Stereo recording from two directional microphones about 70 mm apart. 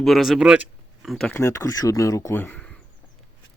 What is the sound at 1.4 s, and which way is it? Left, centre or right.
Speech, left.